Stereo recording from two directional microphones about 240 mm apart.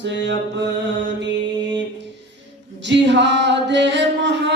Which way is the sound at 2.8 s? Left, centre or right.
Right.